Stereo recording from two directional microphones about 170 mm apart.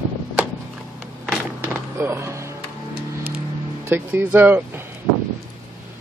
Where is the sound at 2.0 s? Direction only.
15° right (ahead or behind).